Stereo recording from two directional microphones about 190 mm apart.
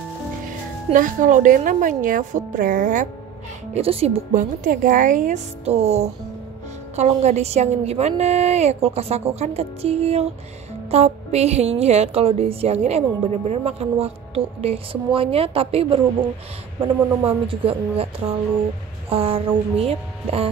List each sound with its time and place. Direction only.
0.9 s a woman's voice: 45° right (ahead or behind)
3.7 s a woman's voice: 30° right (ahead or behind)
4.4 s a woman's voice: 45° right (ahead or behind)
17.3 s a woman's voice: 30° right (ahead or behind)
19.0 s speech: 30° right (ahead or behind)